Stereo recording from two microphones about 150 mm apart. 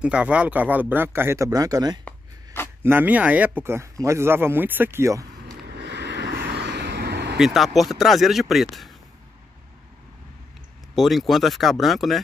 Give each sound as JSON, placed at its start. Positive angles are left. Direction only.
{"t": 0.0, "sound": "speech", "side_deg": -10}
{"t": 2.0, "sound": "a sound", "side_deg": 15}
{"t": 2.8, "sound": "speech", "side_deg": -15}
{"t": 6.2, "sound": "vehicle", "side_deg": -90}
{"t": 7.3, "sound": "speech", "side_deg": 0}
{"t": 11.0, "sound": "speech", "side_deg": 0}